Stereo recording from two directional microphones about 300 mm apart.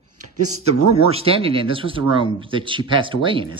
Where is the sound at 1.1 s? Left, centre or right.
Centre.